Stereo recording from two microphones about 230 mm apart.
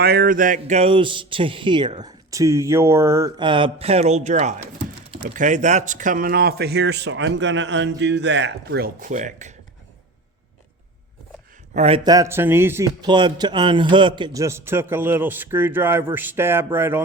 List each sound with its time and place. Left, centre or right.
0.0 s speech: right
11.7 s a man's voice: right; by 17.0 s centre